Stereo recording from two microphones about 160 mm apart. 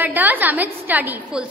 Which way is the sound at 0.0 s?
10° right (ahead or behind).